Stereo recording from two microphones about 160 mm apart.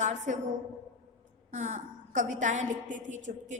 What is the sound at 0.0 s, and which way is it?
Speech, 45° right (ahead or behind).